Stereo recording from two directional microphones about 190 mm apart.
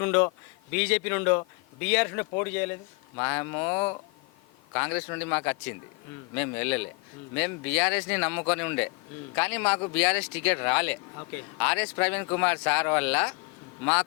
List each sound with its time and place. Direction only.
0.0 s speech: 10° left (ahead or behind)